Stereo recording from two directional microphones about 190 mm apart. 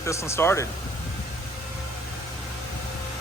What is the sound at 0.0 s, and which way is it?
Speech, 15° left (ahead or behind).